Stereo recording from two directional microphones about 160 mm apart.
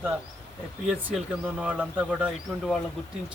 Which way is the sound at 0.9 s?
5° right (ahead or behind).